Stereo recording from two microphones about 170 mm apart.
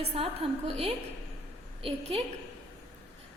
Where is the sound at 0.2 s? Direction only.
35° right (ahead or behind).